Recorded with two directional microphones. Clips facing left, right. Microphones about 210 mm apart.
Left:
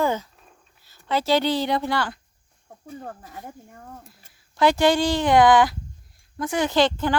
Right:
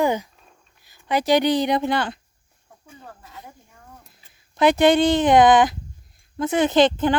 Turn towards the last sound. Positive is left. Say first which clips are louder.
# right 4 dB
turn(degrees=-20)  # may be behind; listen again after turning